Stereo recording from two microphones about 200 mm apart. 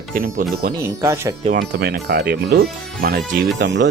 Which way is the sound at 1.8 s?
55° right (ahead or behind).